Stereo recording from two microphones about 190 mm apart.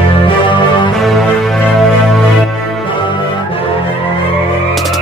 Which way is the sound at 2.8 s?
25° left (ahead or behind).